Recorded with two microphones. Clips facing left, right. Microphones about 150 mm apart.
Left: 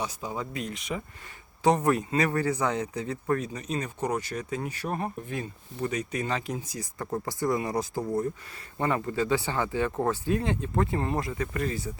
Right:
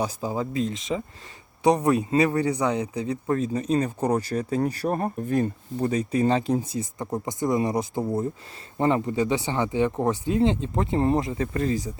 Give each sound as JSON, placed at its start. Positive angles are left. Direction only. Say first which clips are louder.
{"t": 0.0, "sound": "speech", "louder": "right 6 dB", "side_deg": -30}